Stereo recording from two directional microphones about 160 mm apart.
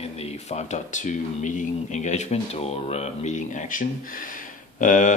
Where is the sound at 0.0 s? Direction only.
40° left (ahead or behind).